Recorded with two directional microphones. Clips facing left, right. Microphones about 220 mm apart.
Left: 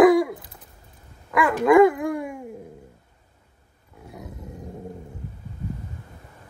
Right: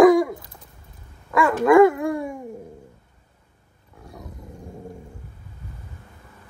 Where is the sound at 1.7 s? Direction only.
20° left (ahead or behind).